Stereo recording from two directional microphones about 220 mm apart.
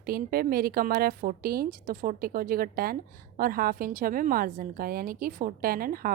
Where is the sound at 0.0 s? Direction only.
45° right (ahead or behind).